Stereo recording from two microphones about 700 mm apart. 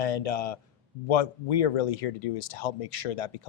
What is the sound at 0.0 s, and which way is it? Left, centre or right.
A man's voice, left.